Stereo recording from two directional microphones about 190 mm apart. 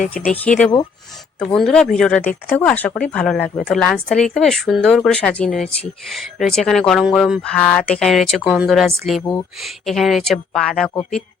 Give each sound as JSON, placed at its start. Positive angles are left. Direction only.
{"t": 0.0, "sound": "speech", "side_deg": 45}
{"t": 1.5, "sound": "speech", "side_deg": 5}